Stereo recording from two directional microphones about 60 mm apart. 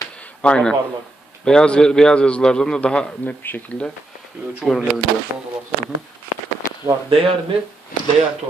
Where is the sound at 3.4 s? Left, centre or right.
Left.